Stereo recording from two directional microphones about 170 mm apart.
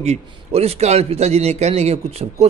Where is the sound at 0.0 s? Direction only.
35° right (ahead or behind).